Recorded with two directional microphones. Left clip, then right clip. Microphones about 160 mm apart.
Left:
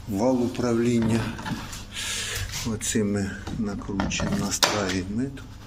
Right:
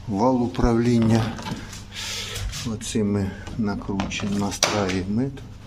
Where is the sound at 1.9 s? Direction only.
30° right (ahead or behind).